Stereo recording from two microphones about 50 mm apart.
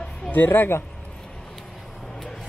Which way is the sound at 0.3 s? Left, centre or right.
Left.